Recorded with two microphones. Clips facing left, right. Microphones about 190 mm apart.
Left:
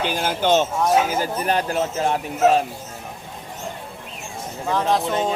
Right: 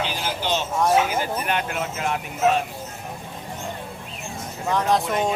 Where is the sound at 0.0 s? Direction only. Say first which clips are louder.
Left 5 dB; 50° left (ahead or behind).